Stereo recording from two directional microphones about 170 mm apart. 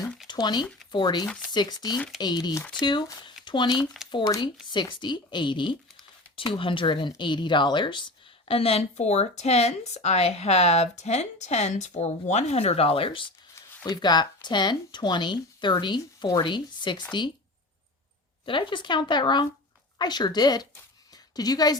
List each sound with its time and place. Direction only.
0.3 s speech: 25° left (ahead or behind)
2.0 s speech: centre (ahead or behind)
2.2 s speech: 25° left (ahead or behind)
18.4 s speech: 30° left (ahead or behind)
21.1 s a sound: 20° left (ahead or behind)